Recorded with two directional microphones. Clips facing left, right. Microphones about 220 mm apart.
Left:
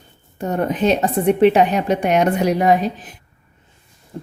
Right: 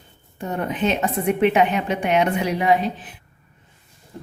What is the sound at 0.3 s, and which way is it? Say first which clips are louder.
A woman's voice: left 5 dB; 45° left (ahead or behind).